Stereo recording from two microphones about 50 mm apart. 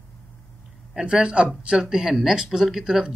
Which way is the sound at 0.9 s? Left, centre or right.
Centre.